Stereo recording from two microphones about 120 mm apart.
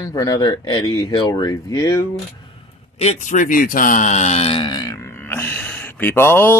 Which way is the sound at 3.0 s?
80° left.